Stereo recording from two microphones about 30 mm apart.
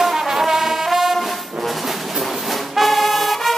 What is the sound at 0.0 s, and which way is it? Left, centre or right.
Brass instrument, centre.